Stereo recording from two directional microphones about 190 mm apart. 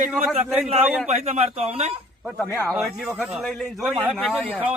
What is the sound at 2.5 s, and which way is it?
Speech, 15° left (ahead or behind).